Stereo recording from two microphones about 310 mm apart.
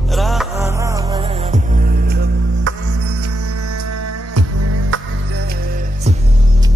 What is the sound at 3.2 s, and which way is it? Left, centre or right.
Music, right.